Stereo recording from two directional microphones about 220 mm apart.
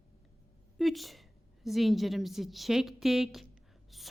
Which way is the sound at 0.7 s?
Centre (ahead or behind).